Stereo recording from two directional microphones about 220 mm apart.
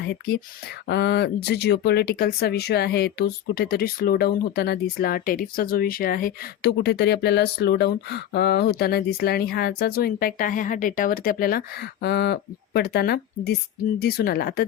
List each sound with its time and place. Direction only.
0.0 s speech: 50° left (ahead or behind)